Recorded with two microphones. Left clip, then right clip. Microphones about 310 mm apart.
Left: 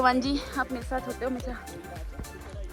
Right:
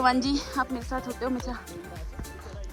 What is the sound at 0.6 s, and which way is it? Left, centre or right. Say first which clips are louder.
Speech: right 1 dB; centre.